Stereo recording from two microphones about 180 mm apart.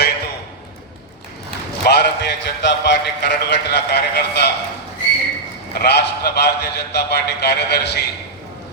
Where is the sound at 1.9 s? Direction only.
70° left (ahead or behind).